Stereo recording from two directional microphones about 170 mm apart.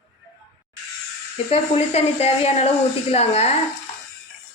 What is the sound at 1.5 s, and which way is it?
Speech, 35° left (ahead or behind).